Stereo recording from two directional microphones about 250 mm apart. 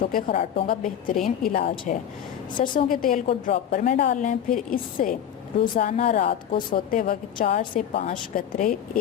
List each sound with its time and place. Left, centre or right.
0.0 s a woman's voice: left
1.6 s speech: left
2.7 s a woman's voice: left
6.7 s a woman's voice: left